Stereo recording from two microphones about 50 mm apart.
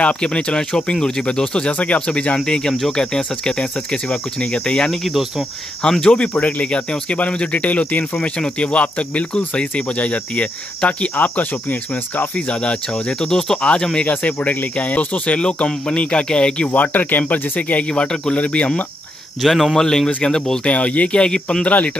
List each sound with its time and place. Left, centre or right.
0.0 s cricket: left
1.0 s speech: centre
6.1 s cricket: left
12.4 s cricket: left
15.3 s cricket: left
16.7 s speech: left
17.2 s cricket: left
19.4 s speech: centre
20.7 s cricket: left
21.6 s cricket: left